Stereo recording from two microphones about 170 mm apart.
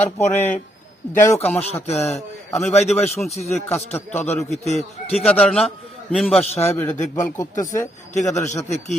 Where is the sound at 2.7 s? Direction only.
40° left (ahead or behind).